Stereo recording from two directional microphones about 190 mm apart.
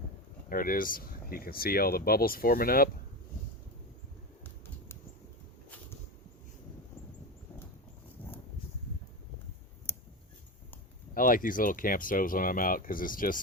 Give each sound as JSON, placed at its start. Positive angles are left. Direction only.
{"t": 0.5, "sound": "speech", "side_deg": 45}
{"t": 11.1, "sound": "speech", "side_deg": 45}